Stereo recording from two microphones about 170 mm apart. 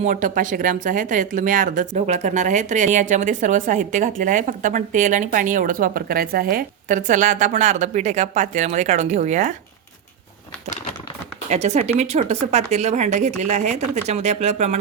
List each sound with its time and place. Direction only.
0.0 s speech: 45° right (ahead or behind)
11.4 s speech: 40° right (ahead or behind)